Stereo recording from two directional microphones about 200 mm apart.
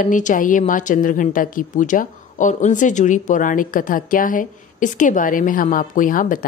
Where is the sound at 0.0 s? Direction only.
40° left (ahead or behind).